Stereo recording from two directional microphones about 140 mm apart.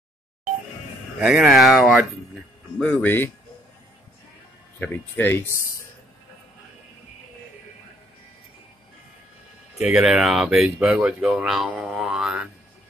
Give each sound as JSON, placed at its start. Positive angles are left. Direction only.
{"t": 1.2, "sound": "speech", "side_deg": -5}
{"t": 2.8, "sound": "speech", "side_deg": 10}
{"t": 4.7, "sound": "speech", "side_deg": 10}
{"t": 9.8, "sound": "speech", "side_deg": -5}